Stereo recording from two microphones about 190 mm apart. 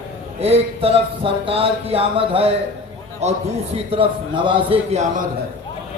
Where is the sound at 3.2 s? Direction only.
35° right (ahead or behind).